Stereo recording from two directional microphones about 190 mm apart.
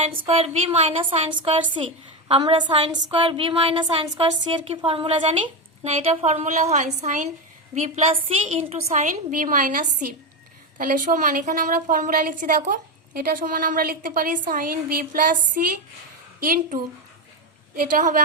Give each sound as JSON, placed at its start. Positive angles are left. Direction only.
{"t": 0.1, "sound": "a woman's voice", "side_deg": -30}